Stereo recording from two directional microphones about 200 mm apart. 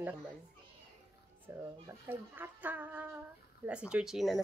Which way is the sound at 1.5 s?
15° right (ahead or behind).